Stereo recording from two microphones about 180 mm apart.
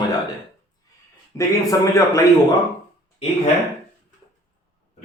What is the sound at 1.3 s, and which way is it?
Speech, 15° left (ahead or behind).